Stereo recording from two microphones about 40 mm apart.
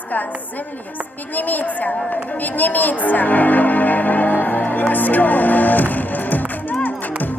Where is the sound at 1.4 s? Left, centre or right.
Left.